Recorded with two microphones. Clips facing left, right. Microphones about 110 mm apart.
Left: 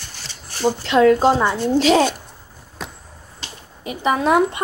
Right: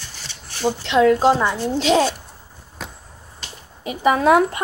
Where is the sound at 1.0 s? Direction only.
Centre (ahead or behind).